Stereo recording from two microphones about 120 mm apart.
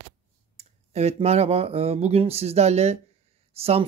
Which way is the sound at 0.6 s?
65° right (ahead or behind).